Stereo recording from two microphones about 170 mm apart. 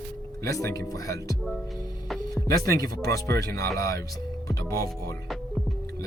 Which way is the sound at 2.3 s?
20° left (ahead or behind).